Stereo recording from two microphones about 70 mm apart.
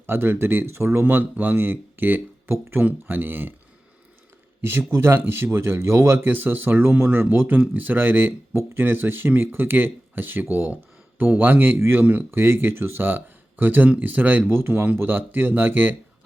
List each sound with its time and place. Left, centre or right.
0.0 s speech: right
4.6 s speech: right